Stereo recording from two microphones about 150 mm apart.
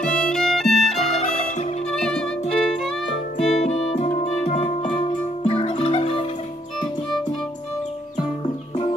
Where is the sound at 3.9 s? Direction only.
50° left (ahead or behind).